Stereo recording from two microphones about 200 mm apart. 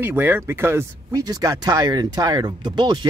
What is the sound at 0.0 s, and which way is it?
Speech, 10° right (ahead or behind).